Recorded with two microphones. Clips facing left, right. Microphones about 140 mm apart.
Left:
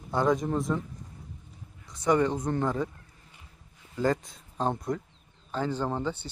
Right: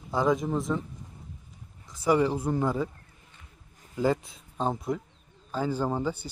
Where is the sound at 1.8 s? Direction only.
5° right (ahead or behind).